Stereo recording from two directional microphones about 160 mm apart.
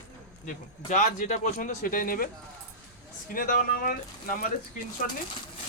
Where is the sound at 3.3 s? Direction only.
60° left (ahead or behind).